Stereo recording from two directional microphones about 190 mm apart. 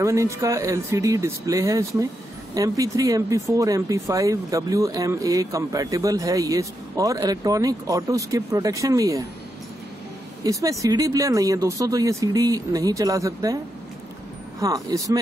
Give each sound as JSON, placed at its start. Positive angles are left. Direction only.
{"t": 0.0, "sound": "speech", "side_deg": -15}
{"t": 10.4, "sound": "speech", "side_deg": -20}
{"t": 14.6, "sound": "speech", "side_deg": -20}